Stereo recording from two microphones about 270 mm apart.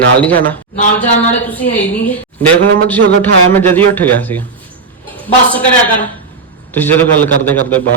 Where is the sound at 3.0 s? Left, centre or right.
Right.